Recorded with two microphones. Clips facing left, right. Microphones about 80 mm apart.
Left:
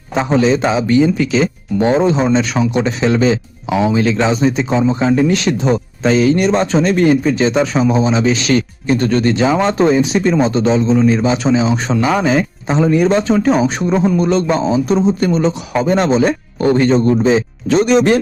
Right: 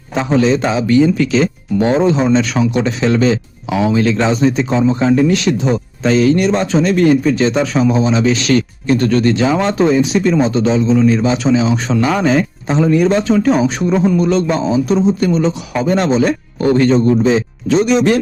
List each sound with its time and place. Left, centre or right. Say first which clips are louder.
0.1 s a man's voice: even; left
5.3 s speech: even; left
6.0 s speech: right 1 dB; centre
11.9 s speech: right 1 dB; centre
12.7 s speech: even; left
17.7 s speech: left 1 dB; left